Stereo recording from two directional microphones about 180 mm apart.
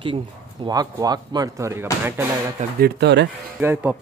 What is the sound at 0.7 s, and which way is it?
Speech, 20° right (ahead or behind).